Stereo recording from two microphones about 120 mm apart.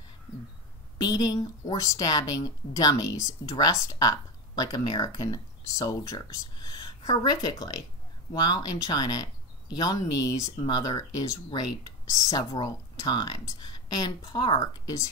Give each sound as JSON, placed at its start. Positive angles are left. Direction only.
{"t": 1.0, "sound": "a woman's voice", "side_deg": 35}